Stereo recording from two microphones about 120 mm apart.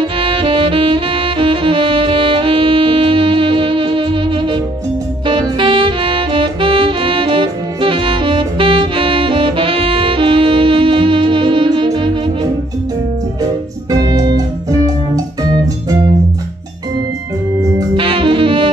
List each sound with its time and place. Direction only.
0.0 s saxophone: 45° right (ahead or behind)
13.4 s organ: 30° right (ahead or behind)
17.9 s saxophone: 45° right (ahead or behind)